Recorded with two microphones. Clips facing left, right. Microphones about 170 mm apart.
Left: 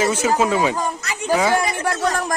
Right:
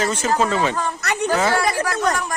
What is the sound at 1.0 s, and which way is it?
Speech, 65° right (ahead or behind).